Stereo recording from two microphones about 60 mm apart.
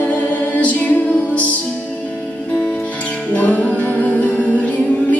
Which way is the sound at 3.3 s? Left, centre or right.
Left.